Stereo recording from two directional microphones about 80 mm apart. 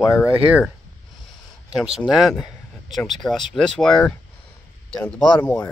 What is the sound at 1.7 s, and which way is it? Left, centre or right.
Speech, centre.